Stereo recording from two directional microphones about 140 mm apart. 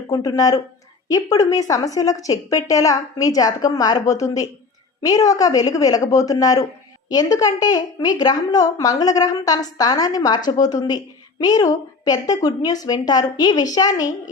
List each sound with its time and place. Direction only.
0.1 s a woman's voice: 25° left (ahead or behind)